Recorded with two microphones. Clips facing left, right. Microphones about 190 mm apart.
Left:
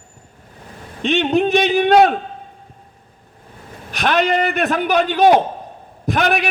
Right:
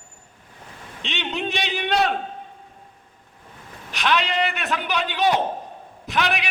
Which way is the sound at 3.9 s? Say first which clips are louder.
Left 6 dB; 50° left (ahead or behind).